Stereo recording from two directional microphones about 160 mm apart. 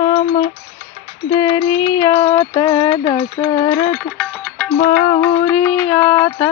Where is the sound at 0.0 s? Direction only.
30° left (ahead or behind).